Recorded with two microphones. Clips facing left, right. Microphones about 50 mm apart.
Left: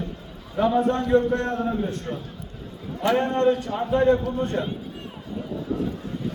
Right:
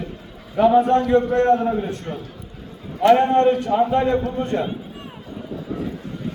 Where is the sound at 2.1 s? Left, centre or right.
Right.